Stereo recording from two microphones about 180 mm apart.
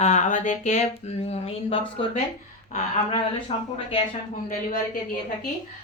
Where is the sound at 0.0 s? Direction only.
40° left (ahead or behind).